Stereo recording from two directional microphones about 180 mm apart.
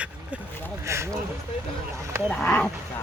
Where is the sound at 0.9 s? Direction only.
15° right (ahead or behind).